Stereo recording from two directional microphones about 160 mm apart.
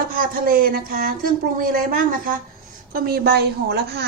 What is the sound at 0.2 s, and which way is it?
A woman's voice, 65° right (ahead or behind).